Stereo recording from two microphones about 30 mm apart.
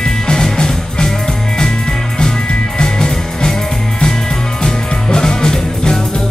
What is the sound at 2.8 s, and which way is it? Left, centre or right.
Music, left.